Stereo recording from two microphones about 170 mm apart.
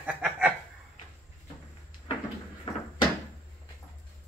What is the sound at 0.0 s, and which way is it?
Chuckle, 5° right (ahead or behind).